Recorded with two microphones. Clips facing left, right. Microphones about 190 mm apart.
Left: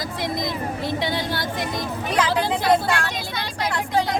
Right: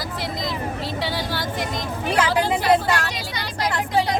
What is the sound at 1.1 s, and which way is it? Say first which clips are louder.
Speech: even; 10° right (ahead or behind).